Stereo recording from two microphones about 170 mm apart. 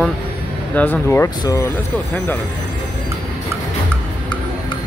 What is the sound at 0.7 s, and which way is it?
Speech, 15° left (ahead or behind).